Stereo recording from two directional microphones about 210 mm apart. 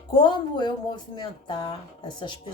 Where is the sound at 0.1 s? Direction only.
20° left (ahead or behind).